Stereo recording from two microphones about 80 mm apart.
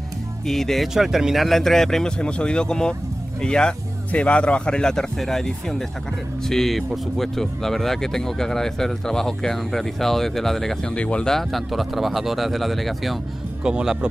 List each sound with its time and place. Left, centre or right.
0.5 s speech: centre
11.0 s speech: centre
13.7 s speech: centre